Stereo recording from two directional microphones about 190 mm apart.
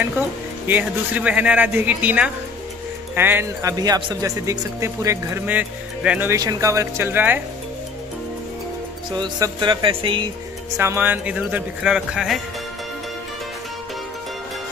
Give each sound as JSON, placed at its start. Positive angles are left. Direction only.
{"t": 0.7, "sound": "speech", "side_deg": -10}
{"t": 9.1, "sound": "speech", "side_deg": -25}
{"t": 10.8, "sound": "speech", "side_deg": -10}